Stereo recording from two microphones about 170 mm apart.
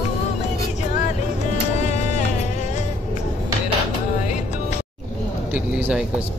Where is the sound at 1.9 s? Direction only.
45° left (ahead or behind).